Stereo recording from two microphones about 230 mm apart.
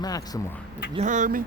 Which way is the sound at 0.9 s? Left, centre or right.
Right.